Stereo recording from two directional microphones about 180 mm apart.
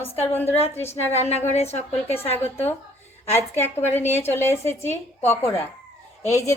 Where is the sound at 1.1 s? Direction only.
35° left (ahead or behind).